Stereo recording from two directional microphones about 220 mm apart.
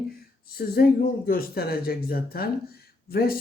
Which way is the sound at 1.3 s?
45° left (ahead or behind).